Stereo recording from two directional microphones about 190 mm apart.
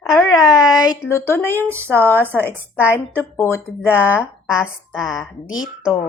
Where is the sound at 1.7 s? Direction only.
10° right (ahead or behind).